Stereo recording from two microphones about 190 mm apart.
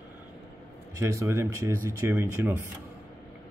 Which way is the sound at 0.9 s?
15° right (ahead or behind).